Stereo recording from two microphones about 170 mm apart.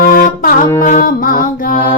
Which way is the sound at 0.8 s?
55° left (ahead or behind).